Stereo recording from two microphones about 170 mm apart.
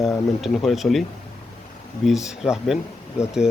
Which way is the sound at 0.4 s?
Centre (ahead or behind).